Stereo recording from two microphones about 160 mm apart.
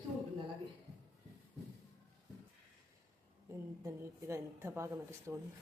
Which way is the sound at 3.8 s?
15° right (ahead or behind).